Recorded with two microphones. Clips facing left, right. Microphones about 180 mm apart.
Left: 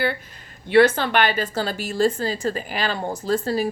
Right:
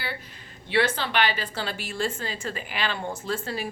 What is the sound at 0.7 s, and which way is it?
A woman's voice, 50° left (ahead or behind).